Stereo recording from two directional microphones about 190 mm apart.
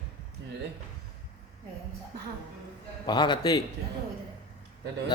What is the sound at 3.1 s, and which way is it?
Speech, 25° left (ahead or behind).